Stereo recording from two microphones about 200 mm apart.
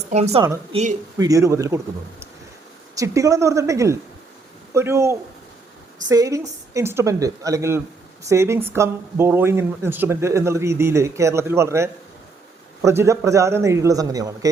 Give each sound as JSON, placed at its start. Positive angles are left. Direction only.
{"t": 0.1, "sound": "a woman's voice", "side_deg": -35}
{"t": 1.2, "sound": "speech", "side_deg": -15}